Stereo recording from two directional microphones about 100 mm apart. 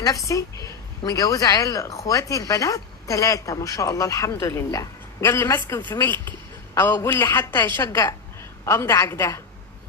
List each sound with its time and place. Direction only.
0.0 s a woman's voice: 35° left (ahead or behind)